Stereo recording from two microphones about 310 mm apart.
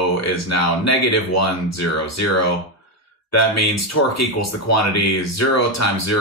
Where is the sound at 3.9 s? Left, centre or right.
Left.